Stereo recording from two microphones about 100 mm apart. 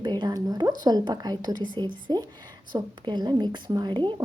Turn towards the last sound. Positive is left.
turn(degrees=-50)  # may be behind; listen again after turning